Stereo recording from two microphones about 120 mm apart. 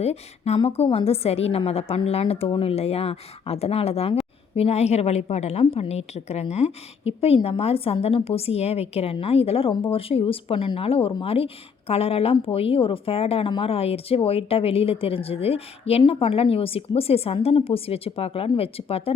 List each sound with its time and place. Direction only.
0.0 s a woman's voice: 60° left (ahead or behind)